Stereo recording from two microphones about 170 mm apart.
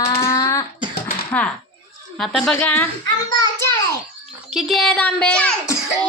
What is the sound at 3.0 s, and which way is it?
Speech, 20° left (ahead or behind).